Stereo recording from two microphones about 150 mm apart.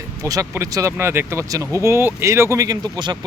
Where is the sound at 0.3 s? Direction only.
20° right (ahead or behind).